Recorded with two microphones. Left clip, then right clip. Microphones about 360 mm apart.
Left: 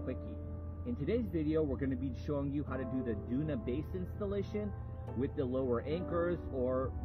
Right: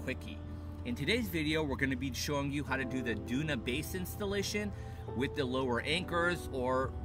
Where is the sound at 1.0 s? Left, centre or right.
Right.